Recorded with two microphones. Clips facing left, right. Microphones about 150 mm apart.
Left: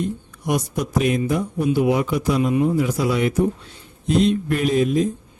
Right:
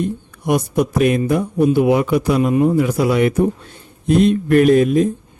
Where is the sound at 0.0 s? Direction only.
55° right (ahead or behind).